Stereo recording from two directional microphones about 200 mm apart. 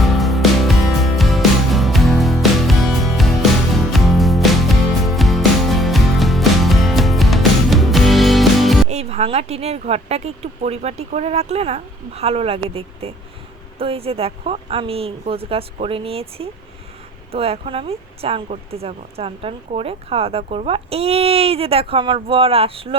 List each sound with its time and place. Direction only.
0.0 s music: centre (ahead or behind)
8.9 s speech: 35° right (ahead or behind)